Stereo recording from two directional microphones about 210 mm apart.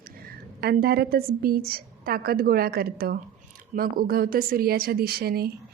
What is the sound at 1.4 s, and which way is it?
A woman's voice, 45° right (ahead or behind).